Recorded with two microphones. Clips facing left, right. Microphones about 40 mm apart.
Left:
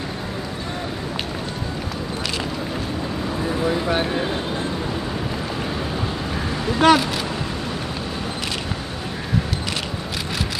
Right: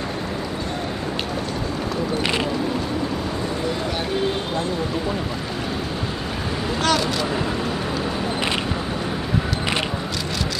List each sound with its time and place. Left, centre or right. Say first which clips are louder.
6.8 s speech: left 7 dB; left